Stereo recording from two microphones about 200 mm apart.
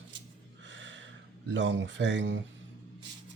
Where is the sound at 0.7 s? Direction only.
65° right (ahead or behind).